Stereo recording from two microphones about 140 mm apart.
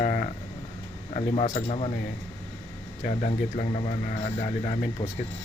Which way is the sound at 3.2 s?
50° left (ahead or behind).